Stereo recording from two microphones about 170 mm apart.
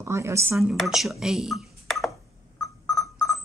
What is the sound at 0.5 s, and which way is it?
Speech, centre (ahead or behind).